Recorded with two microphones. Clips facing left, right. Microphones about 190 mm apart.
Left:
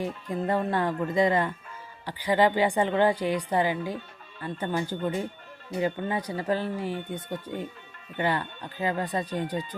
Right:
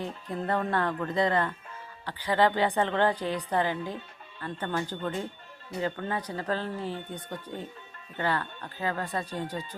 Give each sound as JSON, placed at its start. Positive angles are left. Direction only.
{"t": 0.0, "sound": "speech", "side_deg": 10}